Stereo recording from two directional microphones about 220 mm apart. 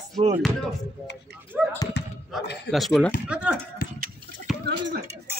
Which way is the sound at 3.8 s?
40° left (ahead or behind).